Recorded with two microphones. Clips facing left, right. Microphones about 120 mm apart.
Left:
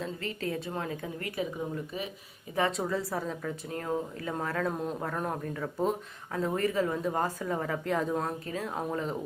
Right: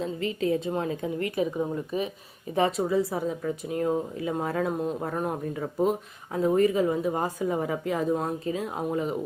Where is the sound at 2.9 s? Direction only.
15° right (ahead or behind).